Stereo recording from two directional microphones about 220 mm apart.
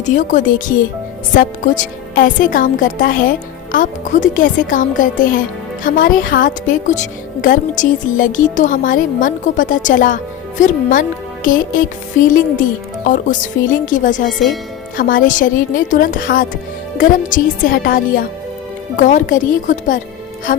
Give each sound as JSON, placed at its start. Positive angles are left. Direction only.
{"t": 0.0, "sound": "speech", "side_deg": 35}
{"t": 14.3, "sound": "speech", "side_deg": 0}
{"t": 14.9, "sound": "speech", "side_deg": 40}